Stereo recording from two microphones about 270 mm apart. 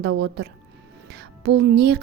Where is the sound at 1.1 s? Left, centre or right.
Right.